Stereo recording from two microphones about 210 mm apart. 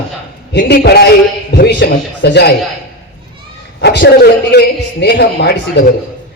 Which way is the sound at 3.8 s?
55° left (ahead or behind).